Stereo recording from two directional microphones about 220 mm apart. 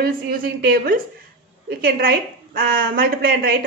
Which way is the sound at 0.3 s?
40° right (ahead or behind).